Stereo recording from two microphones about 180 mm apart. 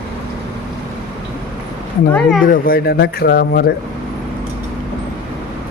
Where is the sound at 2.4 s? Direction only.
55° left (ahead or behind).